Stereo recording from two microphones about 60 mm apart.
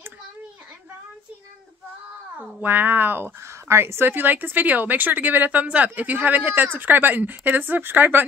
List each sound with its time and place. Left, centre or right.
2.3 s speech: right